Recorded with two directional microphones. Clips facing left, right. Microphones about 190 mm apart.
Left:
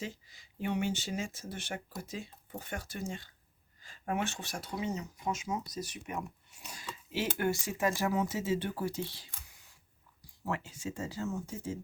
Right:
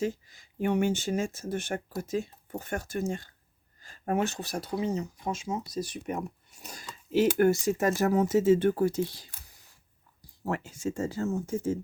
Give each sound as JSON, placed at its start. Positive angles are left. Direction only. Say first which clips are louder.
{"t": 0.0, "sound": "speech", "louder": "right 11 dB", "side_deg": -50}